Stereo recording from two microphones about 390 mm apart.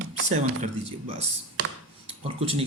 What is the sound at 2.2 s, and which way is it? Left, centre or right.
Speech, centre.